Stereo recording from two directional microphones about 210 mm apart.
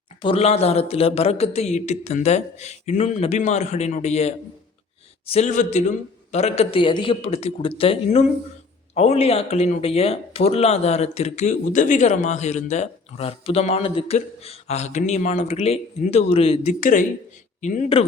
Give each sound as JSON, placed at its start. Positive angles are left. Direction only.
{"t": 0.2, "sound": "a man's voice", "side_deg": 25}